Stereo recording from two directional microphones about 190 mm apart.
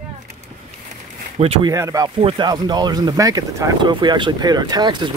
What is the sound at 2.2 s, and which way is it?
Speech, 30° right (ahead or behind).